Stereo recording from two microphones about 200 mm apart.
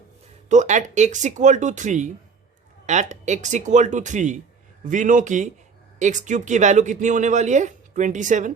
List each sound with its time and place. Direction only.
0.4 s speech: 35° right (ahead or behind)